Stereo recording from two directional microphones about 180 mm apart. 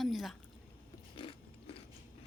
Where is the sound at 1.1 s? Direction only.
30° left (ahead or behind).